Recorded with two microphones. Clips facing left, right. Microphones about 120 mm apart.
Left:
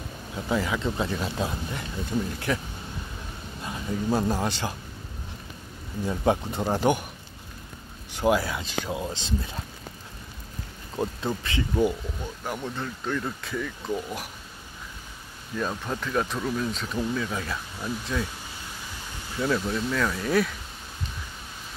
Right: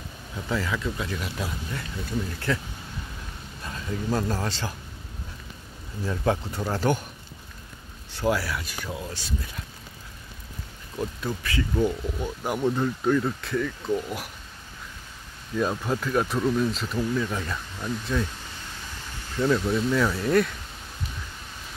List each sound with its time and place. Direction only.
0.5 s speech: 20° left (ahead or behind)
6.0 s speech: 15° left (ahead or behind)
8.1 s speech: 20° left (ahead or behind)
11.0 s speech: 25° left (ahead or behind)
12.4 s speech: 10° right (ahead or behind)
15.5 s speech: 5° right (ahead or behind)
19.3 s speech: centre (ahead or behind)